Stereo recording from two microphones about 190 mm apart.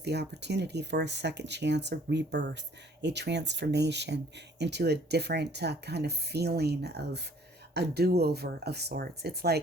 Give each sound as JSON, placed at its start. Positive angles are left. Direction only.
{"t": 0.0, "sound": "speech", "side_deg": -60}